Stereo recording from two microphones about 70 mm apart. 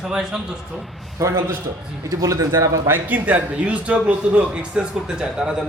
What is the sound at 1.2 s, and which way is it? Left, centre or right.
Speech, right.